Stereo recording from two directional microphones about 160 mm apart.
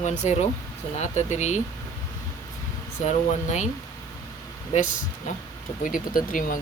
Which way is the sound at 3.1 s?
45° left (ahead or behind).